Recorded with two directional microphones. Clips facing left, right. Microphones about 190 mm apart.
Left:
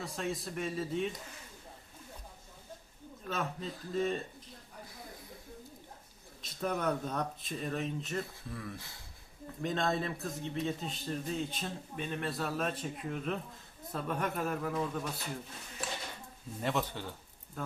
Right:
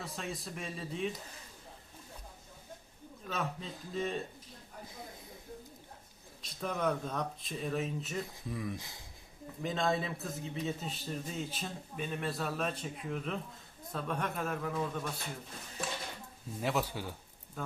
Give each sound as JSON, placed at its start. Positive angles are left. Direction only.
{"t": 0.0, "sound": "a man's voice", "side_deg": 0}
{"t": 3.2, "sound": "a man's voice", "side_deg": 0}
{"t": 6.4, "sound": "a man's voice", "side_deg": 0}
{"t": 8.4, "sound": "speech", "side_deg": -15}
{"t": 9.6, "sound": "a man's voice", "side_deg": 0}
{"t": 16.6, "sound": "a man's voice", "side_deg": -5}